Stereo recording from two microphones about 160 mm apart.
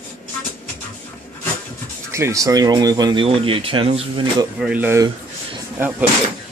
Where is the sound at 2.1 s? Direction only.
20° right (ahead or behind); by 4.2 s 35° right (ahead or behind).